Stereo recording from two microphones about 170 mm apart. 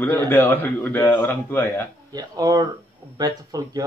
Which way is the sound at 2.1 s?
20° right (ahead or behind).